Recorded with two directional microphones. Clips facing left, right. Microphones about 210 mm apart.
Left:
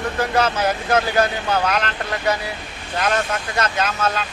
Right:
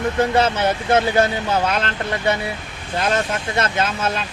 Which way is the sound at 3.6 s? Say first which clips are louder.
Even; 25° right (ahead or behind).